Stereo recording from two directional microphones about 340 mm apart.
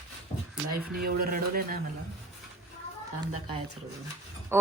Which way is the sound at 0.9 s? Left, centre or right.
Right.